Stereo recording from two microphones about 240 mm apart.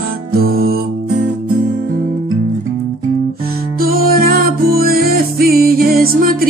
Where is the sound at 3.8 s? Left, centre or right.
Right.